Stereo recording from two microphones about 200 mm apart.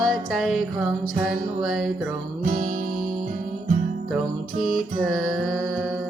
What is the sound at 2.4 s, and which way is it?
Music, 40° right (ahead or behind).